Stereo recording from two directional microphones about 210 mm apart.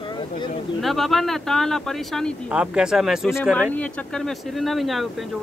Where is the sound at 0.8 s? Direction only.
Centre (ahead or behind).